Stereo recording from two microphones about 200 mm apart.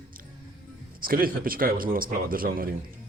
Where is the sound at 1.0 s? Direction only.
45° right (ahead or behind).